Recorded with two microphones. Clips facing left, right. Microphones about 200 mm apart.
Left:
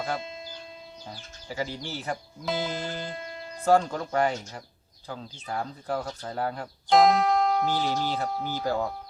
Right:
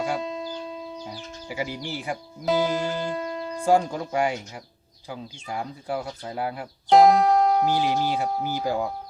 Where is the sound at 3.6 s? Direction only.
10° right (ahead or behind).